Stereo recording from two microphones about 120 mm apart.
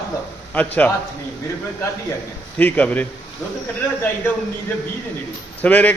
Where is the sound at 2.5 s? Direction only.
10° left (ahead or behind).